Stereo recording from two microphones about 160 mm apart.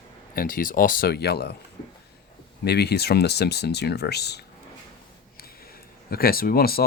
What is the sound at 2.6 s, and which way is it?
Speech, 90° left.